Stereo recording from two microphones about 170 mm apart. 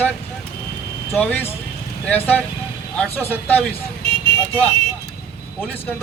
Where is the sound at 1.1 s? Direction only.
10° left (ahead or behind).